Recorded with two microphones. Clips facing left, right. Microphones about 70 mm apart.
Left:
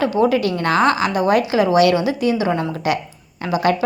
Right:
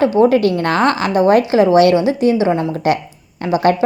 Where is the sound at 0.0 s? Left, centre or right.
Right.